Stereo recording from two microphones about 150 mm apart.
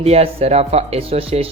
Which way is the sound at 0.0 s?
45° right (ahead or behind).